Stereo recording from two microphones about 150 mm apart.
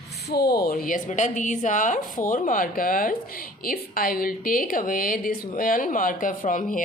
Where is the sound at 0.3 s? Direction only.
90° left.